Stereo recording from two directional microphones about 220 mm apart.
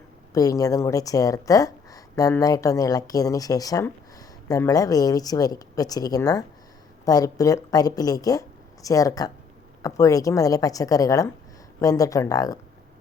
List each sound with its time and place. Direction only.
0.3 s speech: 15° left (ahead or behind)